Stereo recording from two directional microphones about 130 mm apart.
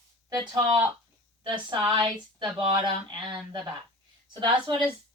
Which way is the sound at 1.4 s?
35° right (ahead or behind).